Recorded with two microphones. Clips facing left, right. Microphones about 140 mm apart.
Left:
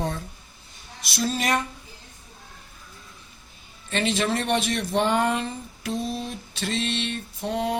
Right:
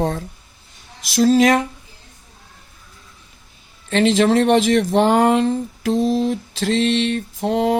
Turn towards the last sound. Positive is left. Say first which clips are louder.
# right 8 dB
turn(degrees=-90)